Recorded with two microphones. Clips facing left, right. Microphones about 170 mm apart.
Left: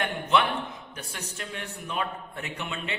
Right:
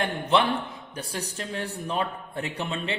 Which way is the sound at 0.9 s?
35° right (ahead or behind).